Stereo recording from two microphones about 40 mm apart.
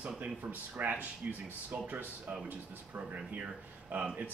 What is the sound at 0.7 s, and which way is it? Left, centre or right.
Speech, right.